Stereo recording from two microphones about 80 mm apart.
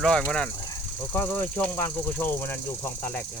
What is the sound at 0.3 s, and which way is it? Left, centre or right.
Speech, centre.